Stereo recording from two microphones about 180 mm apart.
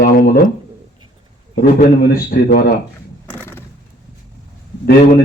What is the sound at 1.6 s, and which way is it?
A man's voice, 60° left (ahead or behind).